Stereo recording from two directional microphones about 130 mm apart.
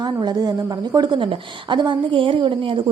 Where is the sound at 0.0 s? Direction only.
35° right (ahead or behind).